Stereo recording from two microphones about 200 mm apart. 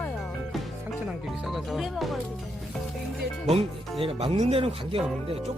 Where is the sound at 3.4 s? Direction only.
30° right (ahead or behind).